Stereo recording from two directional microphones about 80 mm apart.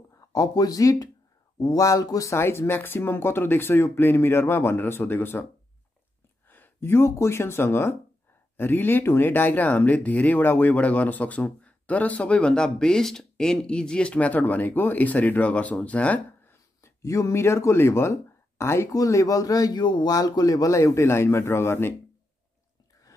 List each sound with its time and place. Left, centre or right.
0.3 s speech: left
2.3 s speech: left
6.5 s speech: left
16.8 s speech: left
18.9 s speech: left